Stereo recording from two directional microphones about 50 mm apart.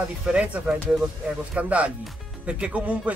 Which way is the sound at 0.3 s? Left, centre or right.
Right.